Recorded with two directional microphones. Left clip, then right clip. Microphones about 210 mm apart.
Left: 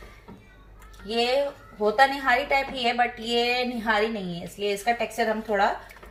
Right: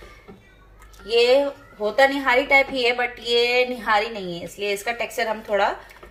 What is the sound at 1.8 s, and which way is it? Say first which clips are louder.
A woman's voice: right 2 dB; 55° right (ahead or behind).